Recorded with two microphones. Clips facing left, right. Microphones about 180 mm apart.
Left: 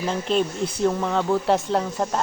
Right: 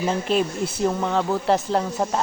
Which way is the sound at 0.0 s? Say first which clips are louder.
Right 1 dB; 5° right (ahead or behind).